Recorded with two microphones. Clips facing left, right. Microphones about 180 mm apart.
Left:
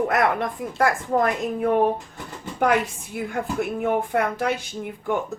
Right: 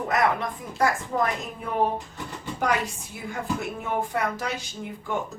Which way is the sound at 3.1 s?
60° left (ahead or behind).